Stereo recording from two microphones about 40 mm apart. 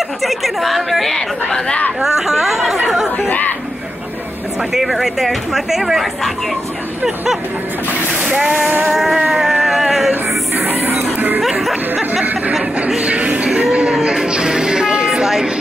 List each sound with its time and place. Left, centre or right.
0.2 s speech: centre
2.0 s speech: centre
3.3 s speech: left
4.6 s speech: centre
8.2 s speech: right
8.8 s speech: centre
9.2 s a sound: centre
10.5 s music: right
11.1 s music: right
11.4 s music: centre
11.9 s a sound: right
14.1 s music: centre
15.0 s a sound: centre